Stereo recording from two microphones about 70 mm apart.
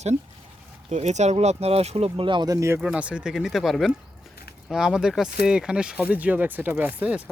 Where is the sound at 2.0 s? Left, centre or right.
Right.